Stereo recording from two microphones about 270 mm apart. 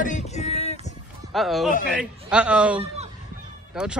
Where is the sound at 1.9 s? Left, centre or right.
Centre.